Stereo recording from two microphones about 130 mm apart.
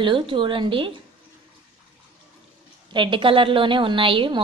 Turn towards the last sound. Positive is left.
turn(degrees=-40)  # may be behind; listen again after turning